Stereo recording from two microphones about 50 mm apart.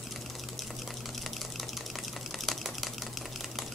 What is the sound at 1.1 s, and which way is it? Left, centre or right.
Typing, centre.